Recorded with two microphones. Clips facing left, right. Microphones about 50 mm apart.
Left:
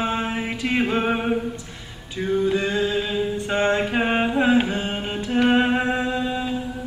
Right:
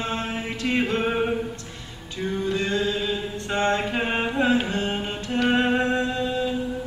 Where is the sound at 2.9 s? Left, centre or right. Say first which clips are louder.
Left 4 dB; centre.